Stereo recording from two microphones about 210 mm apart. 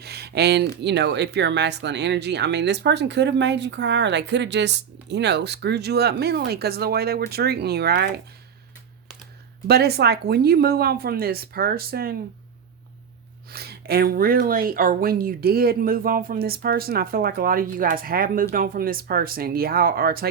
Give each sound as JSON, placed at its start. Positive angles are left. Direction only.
{"t": 0.0, "sound": "a sound", "side_deg": -50}
{"t": 0.8, "sound": "speech", "side_deg": -55}
{"t": 9.6, "sound": "speech", "side_deg": -50}
{"t": 13.5, "sound": "speech", "side_deg": -50}